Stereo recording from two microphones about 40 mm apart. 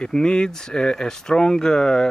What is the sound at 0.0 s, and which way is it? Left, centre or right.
Speech, left.